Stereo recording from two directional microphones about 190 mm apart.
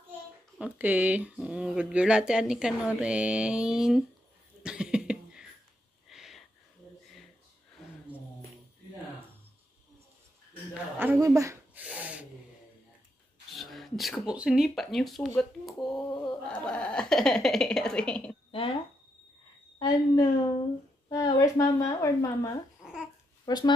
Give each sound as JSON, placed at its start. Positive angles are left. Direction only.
{"t": 0.6, "sound": "speech", "side_deg": -5}
{"t": 4.6, "sound": "cough", "side_deg": -5}
{"t": 6.0, "sound": "a sound", "side_deg": 0}
{"t": 11.0, "sound": "a sound", "side_deg": -15}
{"t": 13.5, "sound": "speech", "side_deg": 0}
{"t": 16.0, "sound": "a sound", "side_deg": 20}
{"t": 16.4, "sound": "speech", "side_deg": 5}
{"t": 18.5, "sound": "speech", "side_deg": 30}
{"t": 19.8, "sound": "a woman's voice", "side_deg": 20}